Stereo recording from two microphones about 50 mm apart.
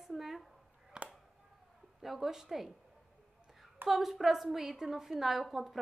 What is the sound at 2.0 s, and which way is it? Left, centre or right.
Speech, centre.